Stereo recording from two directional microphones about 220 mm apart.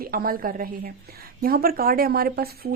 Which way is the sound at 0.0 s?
40° right (ahead or behind).